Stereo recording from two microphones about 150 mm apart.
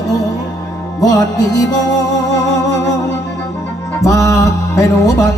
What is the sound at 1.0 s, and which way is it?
Music, 25° left (ahead or behind).